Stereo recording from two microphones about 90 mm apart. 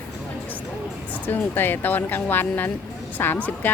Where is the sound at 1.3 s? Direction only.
20° left (ahead or behind).